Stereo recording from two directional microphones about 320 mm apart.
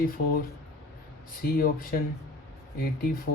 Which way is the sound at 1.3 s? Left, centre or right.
Left.